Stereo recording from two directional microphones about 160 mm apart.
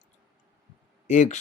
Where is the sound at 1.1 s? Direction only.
50° left (ahead or behind).